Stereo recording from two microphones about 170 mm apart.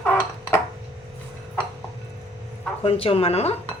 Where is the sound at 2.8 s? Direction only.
35° left (ahead or behind).